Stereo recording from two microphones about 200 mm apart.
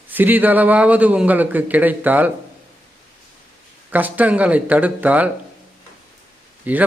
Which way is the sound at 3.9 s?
10° right (ahead or behind).